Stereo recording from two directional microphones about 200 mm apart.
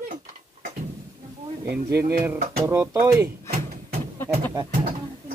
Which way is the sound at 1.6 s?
55° right (ahead or behind).